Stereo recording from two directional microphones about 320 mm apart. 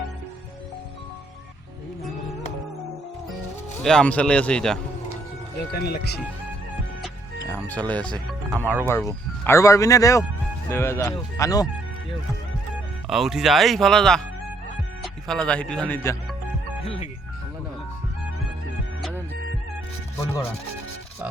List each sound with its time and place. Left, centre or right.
3.8 s speech: centre
5.7 s speech: left
7.0 s music: centre
8.1 s speech: centre
8.9 s speech: centre
13.1 s speech: centre
16.8 s speech: centre